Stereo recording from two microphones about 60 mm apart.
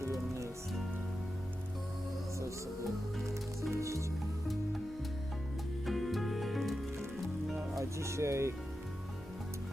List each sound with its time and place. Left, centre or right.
0.0 s music: right
3.2 s music: right
5.8 s music: centre
7.8 s music: right